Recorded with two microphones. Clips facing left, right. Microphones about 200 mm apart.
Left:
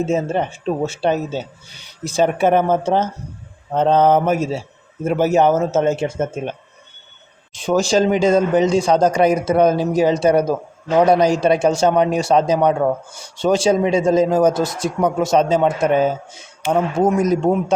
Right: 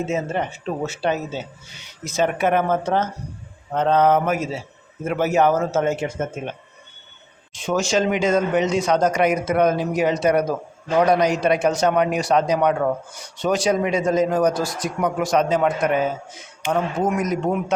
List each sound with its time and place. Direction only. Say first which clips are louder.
0.1 s speech: left 4 dB; 30° left (ahead or behind)